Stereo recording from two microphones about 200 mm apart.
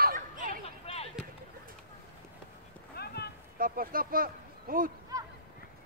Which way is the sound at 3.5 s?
45° right (ahead or behind).